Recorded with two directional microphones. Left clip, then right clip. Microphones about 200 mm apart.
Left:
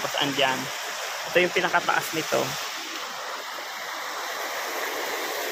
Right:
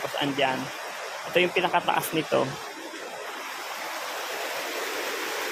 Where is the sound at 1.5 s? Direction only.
25° right (ahead or behind).